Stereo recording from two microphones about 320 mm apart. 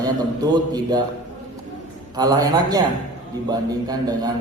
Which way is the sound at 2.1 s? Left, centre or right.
Centre.